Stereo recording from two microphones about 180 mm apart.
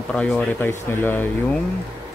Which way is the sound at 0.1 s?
5° left (ahead or behind).